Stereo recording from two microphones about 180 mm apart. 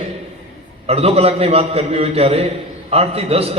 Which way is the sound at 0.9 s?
35° right (ahead or behind).